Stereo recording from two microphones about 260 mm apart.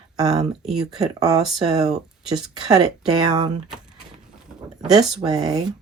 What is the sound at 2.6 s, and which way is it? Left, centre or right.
Speech, centre.